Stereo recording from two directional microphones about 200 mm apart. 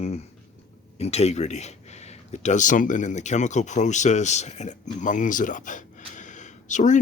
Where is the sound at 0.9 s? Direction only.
30° left (ahead or behind).